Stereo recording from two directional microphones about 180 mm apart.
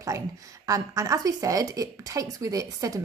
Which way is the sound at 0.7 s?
20° right (ahead or behind).